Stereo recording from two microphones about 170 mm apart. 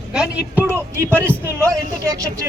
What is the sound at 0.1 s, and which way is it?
Speech, 5° right (ahead or behind).